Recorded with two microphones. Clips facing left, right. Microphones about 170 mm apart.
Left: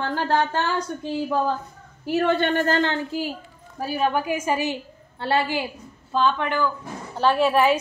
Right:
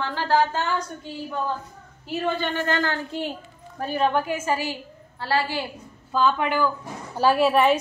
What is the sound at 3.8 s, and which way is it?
A woman's voice, 5° left (ahead or behind).